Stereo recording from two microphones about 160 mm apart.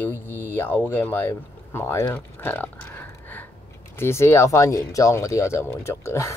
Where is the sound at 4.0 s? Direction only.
15° left (ahead or behind).